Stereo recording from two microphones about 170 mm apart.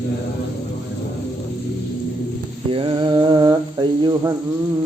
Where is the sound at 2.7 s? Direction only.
30° right (ahead or behind).